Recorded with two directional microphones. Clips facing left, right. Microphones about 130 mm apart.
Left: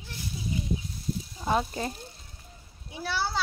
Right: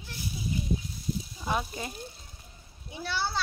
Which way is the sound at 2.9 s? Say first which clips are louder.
Left 2 dB; 5° left (ahead or behind).